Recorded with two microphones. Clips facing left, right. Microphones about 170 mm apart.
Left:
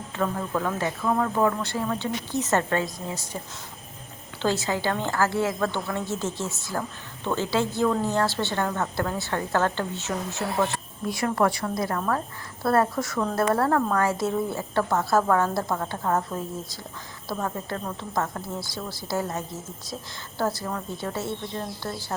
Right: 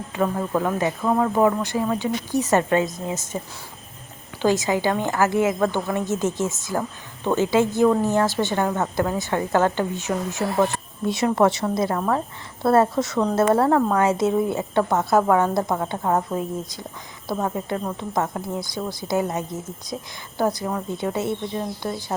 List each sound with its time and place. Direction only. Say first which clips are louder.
0.1 s a woman's voice: right 4 dB; 15° right (ahead or behind)
4.4 s a woman's voice: right 5 dB; 15° right (ahead or behind)